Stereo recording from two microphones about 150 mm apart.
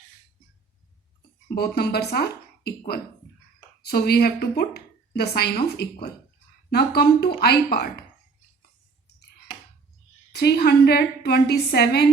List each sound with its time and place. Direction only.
1.5 s a woman's voice: 90° left
10.3 s a woman's voice: 90° left